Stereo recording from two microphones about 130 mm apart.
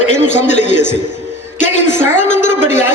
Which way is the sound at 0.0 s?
65° left (ahead or behind).